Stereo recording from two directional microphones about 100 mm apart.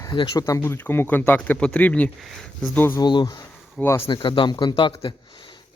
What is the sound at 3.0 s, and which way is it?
Speech, 50° left (ahead or behind).